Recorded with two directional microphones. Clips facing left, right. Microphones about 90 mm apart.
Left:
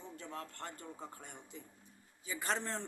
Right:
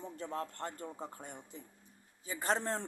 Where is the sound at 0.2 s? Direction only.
35° right (ahead or behind).